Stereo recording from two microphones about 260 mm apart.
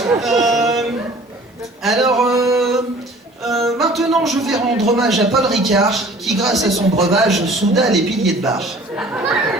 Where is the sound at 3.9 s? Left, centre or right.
Centre.